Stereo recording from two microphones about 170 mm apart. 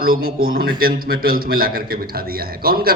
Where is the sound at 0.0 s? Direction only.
60° right (ahead or behind).